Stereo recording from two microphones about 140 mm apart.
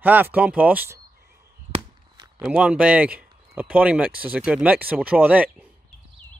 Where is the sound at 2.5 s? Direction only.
10° right (ahead or behind).